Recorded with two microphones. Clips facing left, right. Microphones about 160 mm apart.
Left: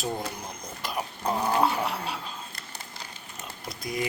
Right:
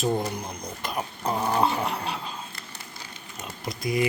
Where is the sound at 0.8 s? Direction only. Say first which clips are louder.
Right 1 dB; centre (ahead or behind).